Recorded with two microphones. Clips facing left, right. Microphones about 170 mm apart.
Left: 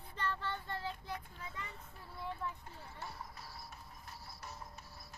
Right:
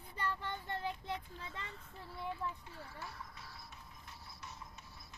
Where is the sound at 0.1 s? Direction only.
15° right (ahead or behind).